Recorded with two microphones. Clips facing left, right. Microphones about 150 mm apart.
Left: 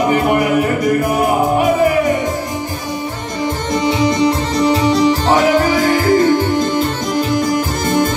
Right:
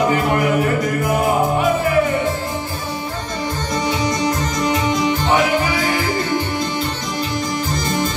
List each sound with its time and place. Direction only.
3.8 s music: 30° left (ahead or behind); by 7.2 s 45° left (ahead or behind)